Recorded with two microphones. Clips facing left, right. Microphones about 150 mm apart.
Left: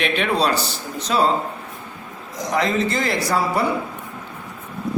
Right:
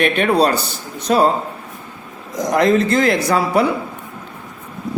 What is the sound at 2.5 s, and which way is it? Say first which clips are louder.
Speech: right 6 dB; 55° right (ahead or behind).